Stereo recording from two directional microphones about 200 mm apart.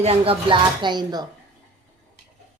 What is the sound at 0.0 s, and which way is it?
Speech, 30° right (ahead or behind).